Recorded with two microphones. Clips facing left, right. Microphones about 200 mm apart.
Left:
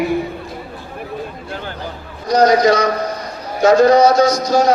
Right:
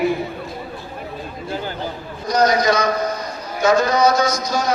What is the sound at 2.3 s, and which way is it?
A man's voice, 35° left (ahead or behind).